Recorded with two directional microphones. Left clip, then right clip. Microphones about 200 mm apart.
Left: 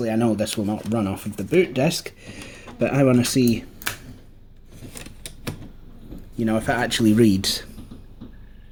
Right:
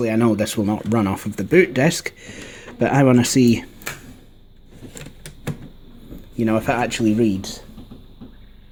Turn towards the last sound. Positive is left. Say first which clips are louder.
# left 2 dB
turn(degrees=30)  # may be behind; listen again after turning